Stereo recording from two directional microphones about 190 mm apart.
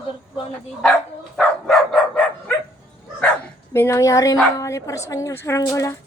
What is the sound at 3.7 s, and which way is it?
A woman's voice, 15° left (ahead or behind).